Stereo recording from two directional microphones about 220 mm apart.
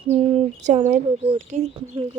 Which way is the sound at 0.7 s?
30° right (ahead or behind).